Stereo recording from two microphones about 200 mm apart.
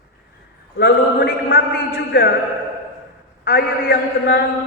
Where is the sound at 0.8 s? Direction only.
50° left (ahead or behind).